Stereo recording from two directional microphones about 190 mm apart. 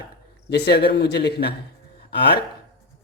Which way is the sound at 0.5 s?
60° left (ahead or behind).